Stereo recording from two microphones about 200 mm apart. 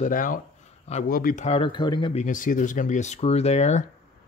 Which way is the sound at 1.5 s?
25° left (ahead or behind).